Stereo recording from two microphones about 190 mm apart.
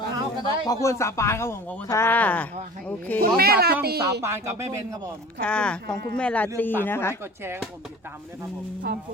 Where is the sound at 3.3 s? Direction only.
55° right (ahead or behind).